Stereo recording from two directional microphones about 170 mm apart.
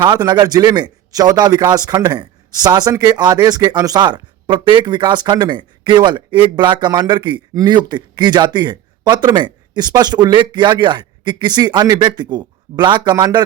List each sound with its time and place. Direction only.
0.0 s a man's voice: 25° right (ahead or behind)